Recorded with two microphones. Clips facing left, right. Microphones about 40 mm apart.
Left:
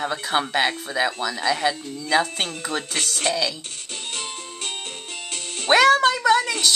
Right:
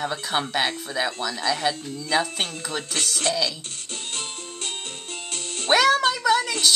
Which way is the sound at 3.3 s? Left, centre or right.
Centre.